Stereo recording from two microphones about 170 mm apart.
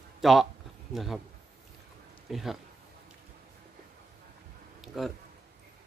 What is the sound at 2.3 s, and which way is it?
Speech, centre (ahead or behind).